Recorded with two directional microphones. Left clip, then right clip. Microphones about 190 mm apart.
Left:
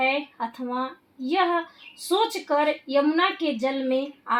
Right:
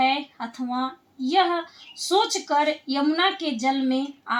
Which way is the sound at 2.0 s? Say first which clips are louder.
Right 2 dB; 45° left (ahead or behind).